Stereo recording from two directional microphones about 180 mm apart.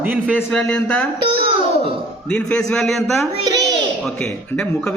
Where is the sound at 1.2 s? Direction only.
30° right (ahead or behind).